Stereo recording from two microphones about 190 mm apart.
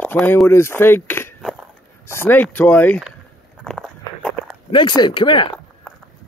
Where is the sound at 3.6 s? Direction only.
Centre (ahead or behind).